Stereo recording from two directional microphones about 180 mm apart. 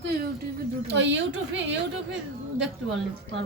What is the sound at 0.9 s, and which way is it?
Speech, 80° right.